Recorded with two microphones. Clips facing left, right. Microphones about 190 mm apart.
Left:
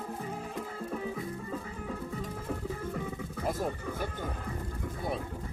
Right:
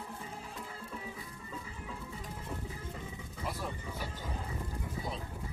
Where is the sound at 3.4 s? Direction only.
50° left (ahead or behind).